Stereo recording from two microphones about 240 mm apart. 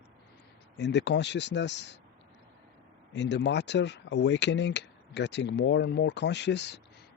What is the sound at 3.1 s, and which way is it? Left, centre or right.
Speech, left.